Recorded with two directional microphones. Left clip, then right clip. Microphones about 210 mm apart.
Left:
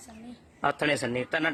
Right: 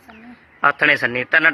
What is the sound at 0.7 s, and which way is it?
Speech, 10° left (ahead or behind).